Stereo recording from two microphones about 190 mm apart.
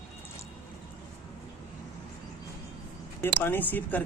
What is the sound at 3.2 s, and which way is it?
Speech, 10° left (ahead or behind).